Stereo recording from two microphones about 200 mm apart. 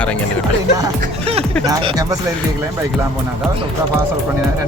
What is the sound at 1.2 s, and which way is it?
Speech, 30° right (ahead or behind).